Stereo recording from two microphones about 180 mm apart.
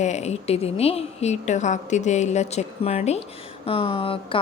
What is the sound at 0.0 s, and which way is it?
A woman's voice, 40° left (ahead or behind).